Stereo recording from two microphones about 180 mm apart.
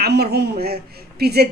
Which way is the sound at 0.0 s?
60° right (ahead or behind).